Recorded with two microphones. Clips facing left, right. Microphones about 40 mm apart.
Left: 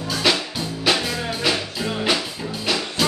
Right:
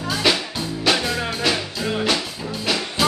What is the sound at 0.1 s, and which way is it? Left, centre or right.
Music, centre.